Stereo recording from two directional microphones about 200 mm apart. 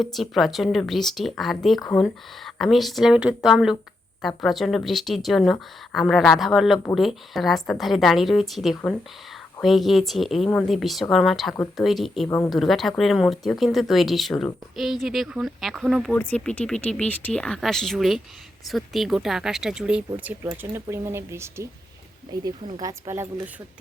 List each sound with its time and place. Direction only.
0.0 s speech: centre (ahead or behind)